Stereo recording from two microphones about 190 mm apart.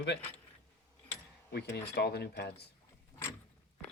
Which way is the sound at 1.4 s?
60° left (ahead or behind).